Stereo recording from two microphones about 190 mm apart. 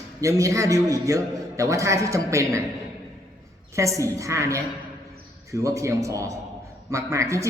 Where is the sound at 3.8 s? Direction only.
15° right (ahead or behind).